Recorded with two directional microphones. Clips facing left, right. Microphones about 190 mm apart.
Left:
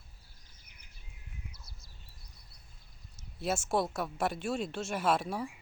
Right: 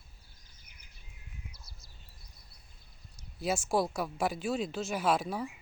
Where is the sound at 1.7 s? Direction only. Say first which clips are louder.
Even; 55° left (ahead or behind).